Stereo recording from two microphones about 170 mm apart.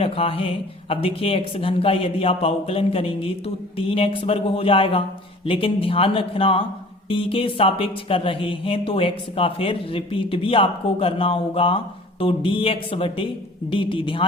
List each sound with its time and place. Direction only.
0.0 s speech: 35° left (ahead or behind)